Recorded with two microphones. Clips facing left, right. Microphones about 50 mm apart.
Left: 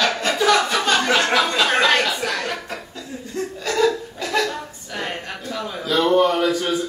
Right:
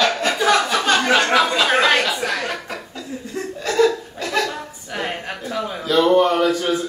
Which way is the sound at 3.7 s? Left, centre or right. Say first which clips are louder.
Right 2 dB; centre.